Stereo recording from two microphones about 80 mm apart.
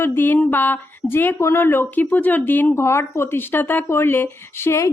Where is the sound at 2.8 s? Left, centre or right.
Left.